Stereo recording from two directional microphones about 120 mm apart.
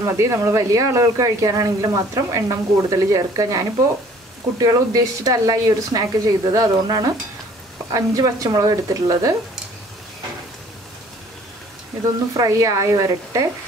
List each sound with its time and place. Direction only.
0.0 s speech: 25° right (ahead or behind)
12.4 s speech: 25° right (ahead or behind)